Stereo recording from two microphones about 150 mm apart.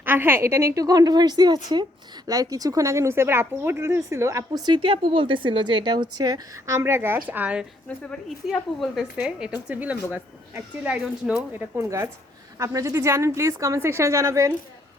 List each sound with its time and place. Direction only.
0.0 s a woman's voice: 15° right (ahead or behind)
7.9 s speech: 5° left (ahead or behind)
11.3 s a woman's voice: 20° right (ahead or behind)